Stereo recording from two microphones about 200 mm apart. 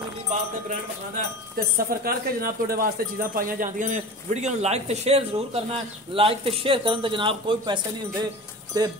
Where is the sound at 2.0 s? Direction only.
50° right (ahead or behind).